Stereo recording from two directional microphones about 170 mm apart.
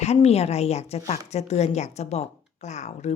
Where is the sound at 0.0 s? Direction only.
40° left (ahead or behind).